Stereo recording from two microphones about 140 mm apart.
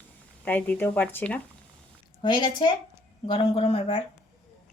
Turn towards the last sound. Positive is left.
turn(degrees=45)  # may be behind; listen again after turning